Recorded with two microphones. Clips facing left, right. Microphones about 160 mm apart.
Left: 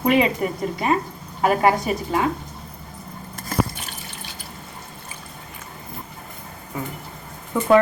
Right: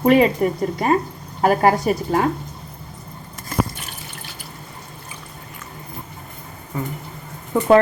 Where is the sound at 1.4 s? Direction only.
45° right (ahead or behind).